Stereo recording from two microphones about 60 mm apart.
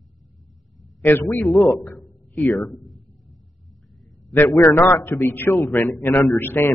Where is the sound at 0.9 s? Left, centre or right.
Left.